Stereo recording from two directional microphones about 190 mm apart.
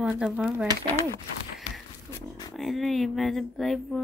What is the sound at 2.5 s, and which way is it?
A woman's voice, centre (ahead or behind).